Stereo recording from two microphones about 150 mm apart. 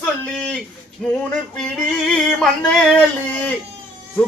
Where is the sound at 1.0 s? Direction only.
5° left (ahead or behind).